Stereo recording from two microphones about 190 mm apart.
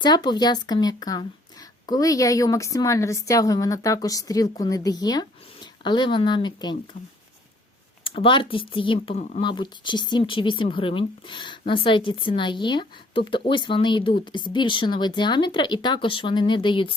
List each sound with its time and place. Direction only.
0.0 s a woman's voice: 20° left (ahead or behind)
8.0 s speech: 25° left (ahead or behind)